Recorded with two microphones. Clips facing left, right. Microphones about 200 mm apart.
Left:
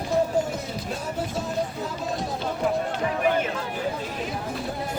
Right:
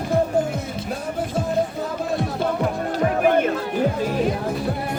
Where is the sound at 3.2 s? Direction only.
55° right (ahead or behind).